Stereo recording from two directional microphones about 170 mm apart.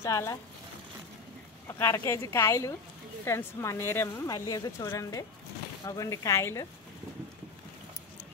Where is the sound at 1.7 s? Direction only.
15° left (ahead or behind).